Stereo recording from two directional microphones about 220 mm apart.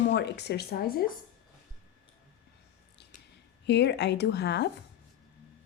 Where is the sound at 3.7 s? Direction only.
50° left (ahead or behind).